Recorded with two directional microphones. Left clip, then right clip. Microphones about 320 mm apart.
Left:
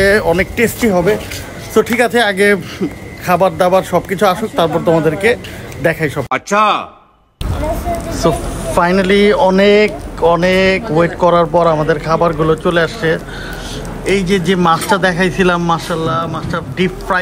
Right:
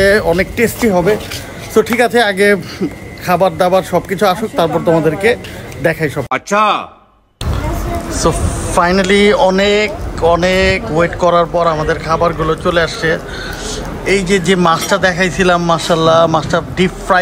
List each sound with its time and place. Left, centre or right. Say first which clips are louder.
0.0 s a man's voice: right 1 dB; centre
8.1 s a man's voice: right 1 dB; centre